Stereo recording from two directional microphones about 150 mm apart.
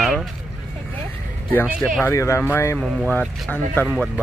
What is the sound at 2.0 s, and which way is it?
Speech, 20° left (ahead or behind).